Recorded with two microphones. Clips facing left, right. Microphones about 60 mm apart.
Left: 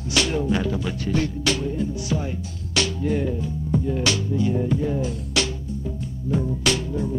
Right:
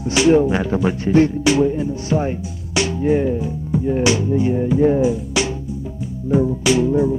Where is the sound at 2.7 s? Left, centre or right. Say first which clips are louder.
Right 6 dB; right.